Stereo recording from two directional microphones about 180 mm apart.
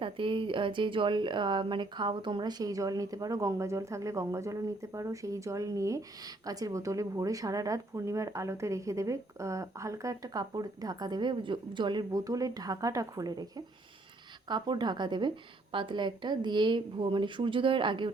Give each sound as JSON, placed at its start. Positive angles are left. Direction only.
{"t": 0.0, "sound": "speech", "side_deg": -30}
{"t": 14.4, "sound": "speech", "side_deg": -25}